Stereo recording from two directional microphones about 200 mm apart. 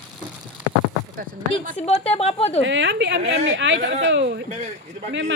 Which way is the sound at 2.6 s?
65° right (ahead or behind).